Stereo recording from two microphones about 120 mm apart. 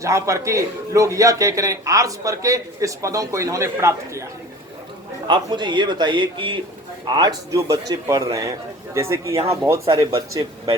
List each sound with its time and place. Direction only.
0.0 s a man's voice: 25° right (ahead or behind)
5.3 s a man's voice: 40° right (ahead or behind)